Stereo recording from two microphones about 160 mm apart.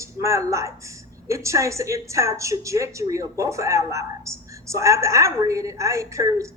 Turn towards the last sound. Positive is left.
turn(degrees=-20)  # may be behind; listen again after turning